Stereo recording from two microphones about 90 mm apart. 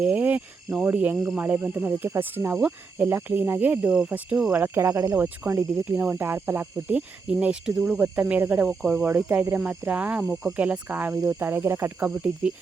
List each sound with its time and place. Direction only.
0.0 s insect: 15° right (ahead or behind)
0.9 s speech: 20° right (ahead or behind)
5.8 s speech: 15° right (ahead or behind)
9.0 s speech: 20° right (ahead or behind)